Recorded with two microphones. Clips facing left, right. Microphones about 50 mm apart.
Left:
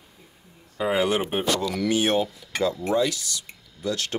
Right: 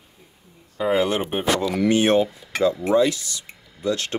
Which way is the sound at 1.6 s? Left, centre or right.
Right.